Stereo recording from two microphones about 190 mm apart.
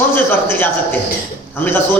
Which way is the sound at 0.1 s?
10° left (ahead or behind).